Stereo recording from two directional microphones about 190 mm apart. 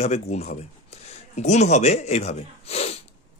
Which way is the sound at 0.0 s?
35° left (ahead or behind).